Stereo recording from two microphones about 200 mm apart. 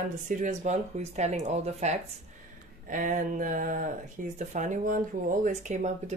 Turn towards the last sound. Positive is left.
turn(degrees=-35)  # may be behind; listen again after turning